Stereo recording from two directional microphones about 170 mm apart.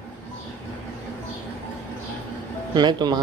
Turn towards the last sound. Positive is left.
turn(degrees=-25)  # may be behind; listen again after turning